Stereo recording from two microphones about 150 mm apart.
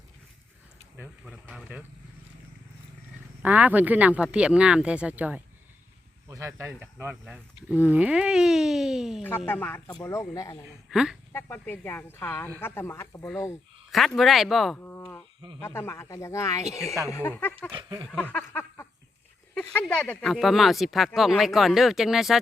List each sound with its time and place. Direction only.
1.2 s speech: 5° right (ahead or behind)
3.4 s speech: 10° right (ahead or behind)
6.2 s speech: 20° right (ahead or behind); by 9.2 s 5° right (ahead or behind)
9.5 s speech: 15° left (ahead or behind)
10.8 s speech: centre (ahead or behind)
11.3 s speech: 15° left (ahead or behind)
13.9 s speech: centre (ahead or behind)
14.8 s a sound: 15° left (ahead or behind)
15.6 s speech: 15° left (ahead or behind)
17.7 s a sound: 30° right (ahead or behind)
18.1 s speech: 10° left (ahead or behind)